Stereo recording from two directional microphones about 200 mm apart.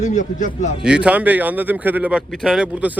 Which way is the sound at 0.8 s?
5° right (ahead or behind).